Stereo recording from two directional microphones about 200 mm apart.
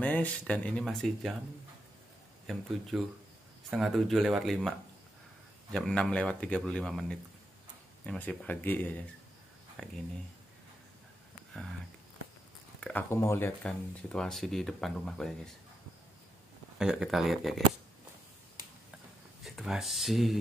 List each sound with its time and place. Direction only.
0.0 s speech: 5° left (ahead or behind)
2.9 s speech: 5° right (ahead or behind)
12.8 s speech: 10° left (ahead or behind)
16.7 s speech: 5° right (ahead or behind)
19.4 s speech: centre (ahead or behind)